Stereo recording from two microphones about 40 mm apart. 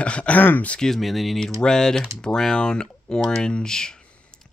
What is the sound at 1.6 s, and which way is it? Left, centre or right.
Speech, centre.